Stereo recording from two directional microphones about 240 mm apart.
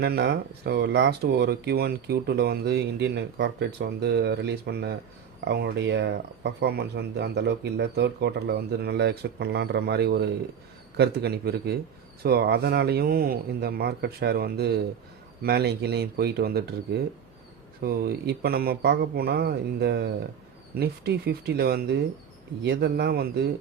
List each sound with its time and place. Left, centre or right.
0.0 s speech: right
17.8 s speech: right